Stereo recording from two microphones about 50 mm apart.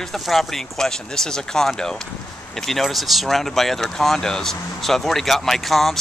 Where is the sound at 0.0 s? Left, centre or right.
Centre.